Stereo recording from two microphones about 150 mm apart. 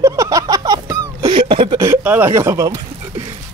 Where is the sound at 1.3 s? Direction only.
35° right (ahead or behind).